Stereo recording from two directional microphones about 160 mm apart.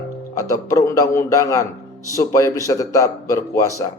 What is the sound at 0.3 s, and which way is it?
A man's voice, 20° left (ahead or behind).